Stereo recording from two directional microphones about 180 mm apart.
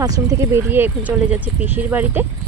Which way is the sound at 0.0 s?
20° right (ahead or behind).